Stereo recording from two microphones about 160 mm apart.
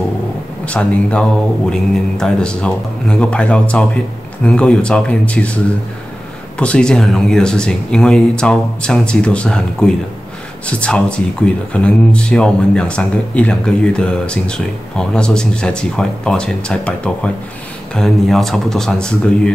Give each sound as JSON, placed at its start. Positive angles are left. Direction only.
{"t": 0.7, "sound": "speech", "side_deg": 5}
{"t": 6.6, "sound": "speech", "side_deg": 5}